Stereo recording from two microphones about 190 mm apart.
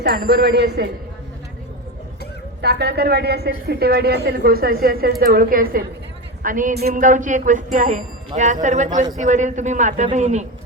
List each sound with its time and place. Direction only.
0.3 s speech: 60° right (ahead or behind)
2.6 s a woman's voice: 60° right (ahead or behind); by 10.4 s 40° right (ahead or behind)